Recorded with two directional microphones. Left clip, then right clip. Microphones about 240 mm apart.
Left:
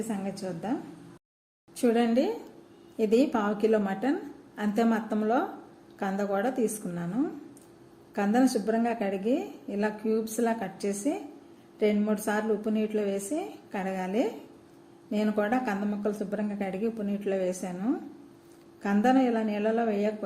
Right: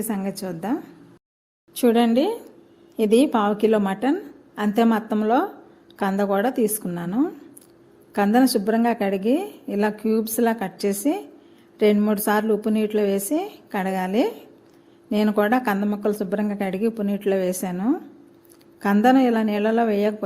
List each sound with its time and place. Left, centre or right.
0.1 s a woman's voice: right
1.8 s a woman's voice: right